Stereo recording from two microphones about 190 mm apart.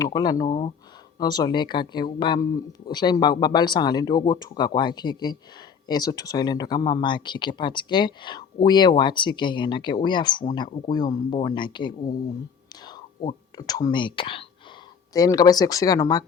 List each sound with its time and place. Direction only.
0.0 s speech: 20° left (ahead or behind)
13.6 s speech: 20° left (ahead or behind)